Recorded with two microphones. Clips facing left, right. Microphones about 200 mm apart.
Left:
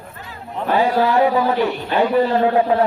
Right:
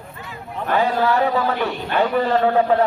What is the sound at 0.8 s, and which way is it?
Speech, 15° left (ahead or behind).